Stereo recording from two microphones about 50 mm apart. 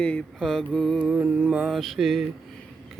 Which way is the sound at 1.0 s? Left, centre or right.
Right.